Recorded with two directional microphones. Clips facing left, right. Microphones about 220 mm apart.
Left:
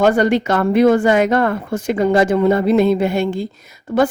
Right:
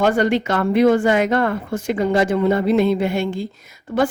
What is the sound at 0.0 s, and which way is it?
A woman's voice, 45° left (ahead or behind).